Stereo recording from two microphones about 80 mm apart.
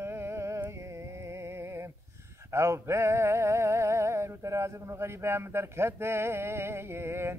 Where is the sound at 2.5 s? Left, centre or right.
Right.